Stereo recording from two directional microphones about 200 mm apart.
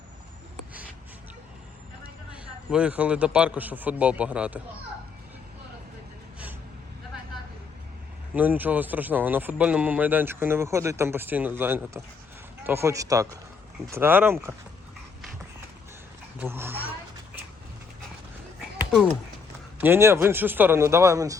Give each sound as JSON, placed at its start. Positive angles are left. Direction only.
{"t": 2.3, "sound": "speech", "side_deg": -5}
{"t": 8.4, "sound": "speech", "side_deg": -10}
{"t": 16.4, "sound": "speech", "side_deg": -10}
{"t": 18.8, "sound": "a sound", "side_deg": 0}
{"t": 19.8, "sound": "speech", "side_deg": -10}